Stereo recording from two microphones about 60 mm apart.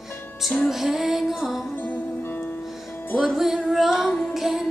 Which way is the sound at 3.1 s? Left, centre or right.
Centre.